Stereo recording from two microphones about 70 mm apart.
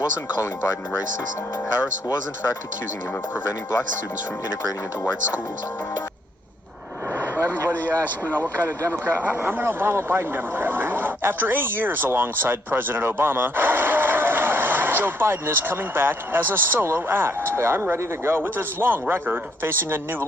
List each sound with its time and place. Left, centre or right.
7.2 s vehicle: right
8.4 s speech: right